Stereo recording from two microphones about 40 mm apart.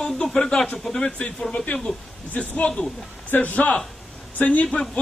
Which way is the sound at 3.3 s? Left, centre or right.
Left.